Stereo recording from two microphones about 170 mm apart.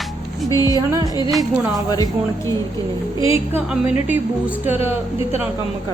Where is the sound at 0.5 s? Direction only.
20° left (ahead or behind).